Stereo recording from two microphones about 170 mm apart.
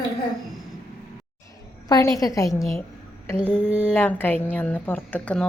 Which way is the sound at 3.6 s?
10° right (ahead or behind).